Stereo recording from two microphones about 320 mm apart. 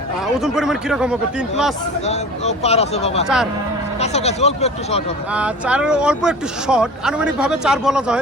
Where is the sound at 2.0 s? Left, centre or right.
Centre.